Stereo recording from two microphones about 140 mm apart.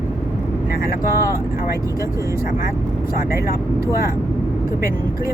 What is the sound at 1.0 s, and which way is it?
Speech, 20° right (ahead or behind).